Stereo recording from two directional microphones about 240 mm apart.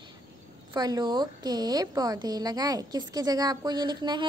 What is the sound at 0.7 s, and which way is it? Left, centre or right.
Speech, centre.